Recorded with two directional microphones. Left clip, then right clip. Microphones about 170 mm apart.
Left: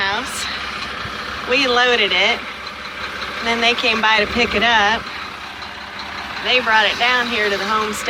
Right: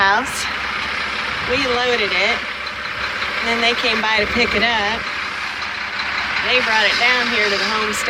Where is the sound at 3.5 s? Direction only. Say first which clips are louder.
Left 2 dB; centre (ahead or behind).